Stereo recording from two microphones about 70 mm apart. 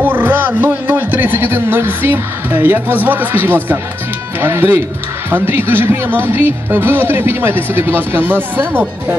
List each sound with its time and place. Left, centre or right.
0.0 s a man's voice: right